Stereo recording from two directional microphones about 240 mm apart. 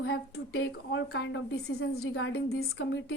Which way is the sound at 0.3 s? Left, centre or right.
Left.